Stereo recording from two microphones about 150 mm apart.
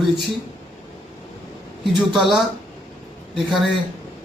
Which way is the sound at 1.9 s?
Centre (ahead or behind).